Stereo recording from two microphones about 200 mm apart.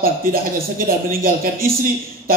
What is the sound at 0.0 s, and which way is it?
Speech, 45° right (ahead or behind).